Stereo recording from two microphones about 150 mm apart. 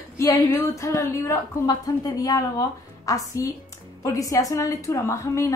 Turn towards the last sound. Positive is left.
turn(degrees=20)  # may be behind; listen again after turning